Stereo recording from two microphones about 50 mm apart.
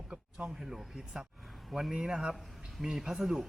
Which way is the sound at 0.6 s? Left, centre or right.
Centre.